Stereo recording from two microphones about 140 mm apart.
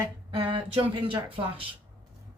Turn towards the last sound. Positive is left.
turn(degrees=-40)  # may be behind; listen again after turning